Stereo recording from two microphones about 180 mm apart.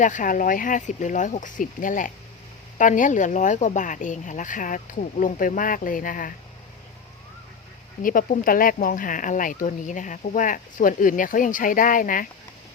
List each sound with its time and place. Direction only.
0.0 s speech: 45° left (ahead or behind)
8.0 s speech: 50° left (ahead or behind)